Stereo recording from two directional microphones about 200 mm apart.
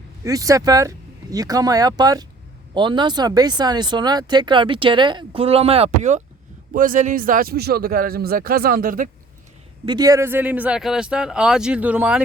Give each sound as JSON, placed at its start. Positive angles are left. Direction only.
{"t": 0.3, "sound": "a man's voice", "side_deg": -15}
{"t": 9.8, "sound": "speech", "side_deg": -20}